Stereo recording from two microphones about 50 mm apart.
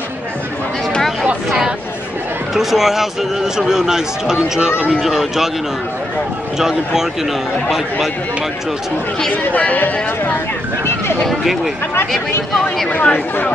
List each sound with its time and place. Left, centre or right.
2.5 s speech: centre
5.0 s speech: centre
6.6 s speech: centre
9.3 s speech: left
11.2 s speech: centre
13.0 s speech: left